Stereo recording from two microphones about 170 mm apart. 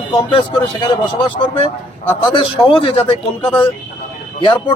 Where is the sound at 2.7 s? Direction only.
30° left (ahead or behind).